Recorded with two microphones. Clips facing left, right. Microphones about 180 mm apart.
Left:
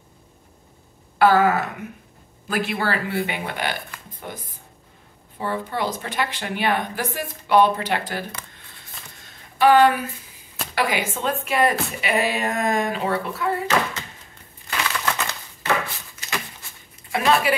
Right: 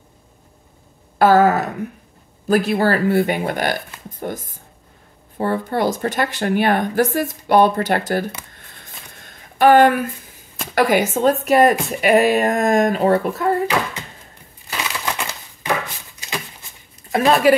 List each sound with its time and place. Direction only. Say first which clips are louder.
1.1 s a sound: right 4 dB; 40° right (ahead or behind)
2.4 s speech: right 8 dB; 40° right (ahead or behind)
9.2 s a sound: right 4 dB; 50° right (ahead or behind)
10.7 s speech: right 8 dB; 45° right (ahead or behind)
14.7 s crushing: even; 15° right (ahead or behind)
17.1 s speech: right 6 dB; 40° right (ahead or behind)